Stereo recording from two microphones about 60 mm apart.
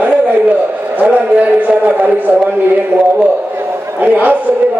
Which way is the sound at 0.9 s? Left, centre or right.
Right.